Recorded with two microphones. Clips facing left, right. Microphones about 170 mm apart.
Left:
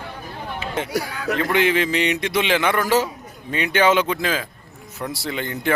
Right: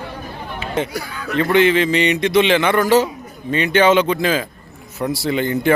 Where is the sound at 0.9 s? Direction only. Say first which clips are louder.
Left 3 dB; 80° left.